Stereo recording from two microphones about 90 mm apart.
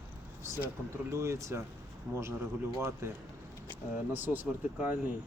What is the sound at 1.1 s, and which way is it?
Speech, 30° right (ahead or behind).